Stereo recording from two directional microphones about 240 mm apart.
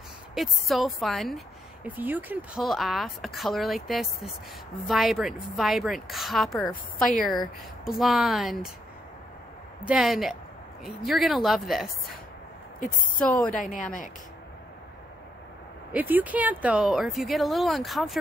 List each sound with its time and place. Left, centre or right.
0.3 s speech: centre
9.8 s speech: centre
13.2 s speech: centre
13.5 s a woman's voice: left
15.9 s speech: centre